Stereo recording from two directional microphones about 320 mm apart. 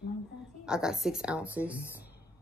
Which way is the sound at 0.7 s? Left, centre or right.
Centre.